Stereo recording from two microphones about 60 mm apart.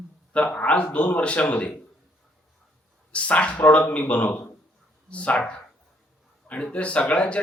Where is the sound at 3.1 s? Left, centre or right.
Left.